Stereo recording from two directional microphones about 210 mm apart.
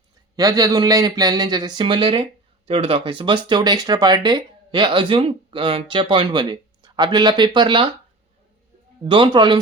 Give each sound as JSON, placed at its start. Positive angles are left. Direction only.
{"t": 0.3, "sound": "speech", "side_deg": -15}
{"t": 9.0, "sound": "speech", "side_deg": -25}